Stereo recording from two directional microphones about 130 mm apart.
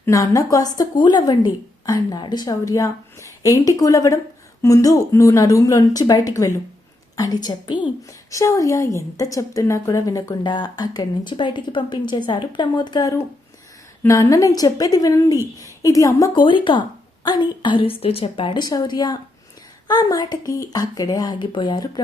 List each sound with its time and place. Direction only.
0.0 s a woman's voice: 25° left (ahead or behind)